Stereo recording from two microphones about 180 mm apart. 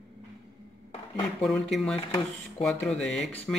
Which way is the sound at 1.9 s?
35° left (ahead or behind).